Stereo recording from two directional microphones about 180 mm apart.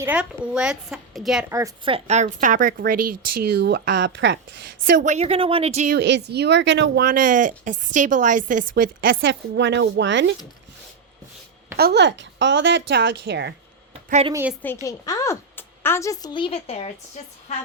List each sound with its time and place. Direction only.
0.0 s a woman's voice: 5° right (ahead or behind)
1.5 s a woman's voice: 15° right (ahead or behind)
1.8 s speech: 35° right (ahead or behind); by 4.4 s 85° right
4.9 s a woman's voice: 45° right (ahead or behind)
6.0 s speech: 75° right (ahead or behind); by 9.1 s 55° right (ahead or behind)
9.2 s speech: 85° right
11.8 s speech: 65° right (ahead or behind)
14.1 s a woman's voice: 35° right (ahead or behind)
14.6 s a woman's voice: 15° left (ahead or behind); by 16.9 s 35° left (ahead or behind)